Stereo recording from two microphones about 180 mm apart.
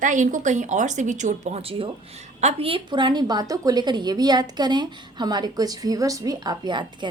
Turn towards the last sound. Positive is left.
turn(degrees=-25)  # may be behind; listen again after turning